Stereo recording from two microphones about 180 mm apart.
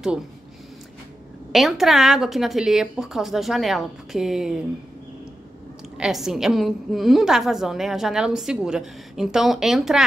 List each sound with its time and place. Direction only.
1.5 s a woman's voice: centre (ahead or behind)
5.9 s a woman's voice: 5° right (ahead or behind)